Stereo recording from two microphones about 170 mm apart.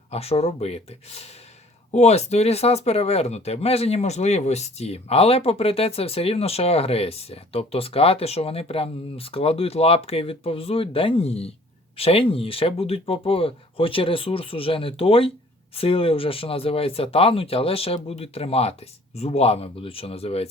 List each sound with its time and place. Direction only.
0.1 s speech: 35° left (ahead or behind)